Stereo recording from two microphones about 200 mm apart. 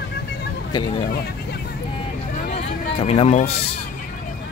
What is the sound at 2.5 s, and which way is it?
Vehicle, 30° left (ahead or behind).